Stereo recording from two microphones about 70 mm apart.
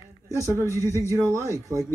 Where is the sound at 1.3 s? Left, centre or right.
Right.